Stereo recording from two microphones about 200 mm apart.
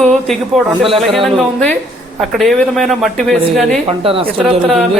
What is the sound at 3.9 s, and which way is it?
Speech, 25° right (ahead or behind).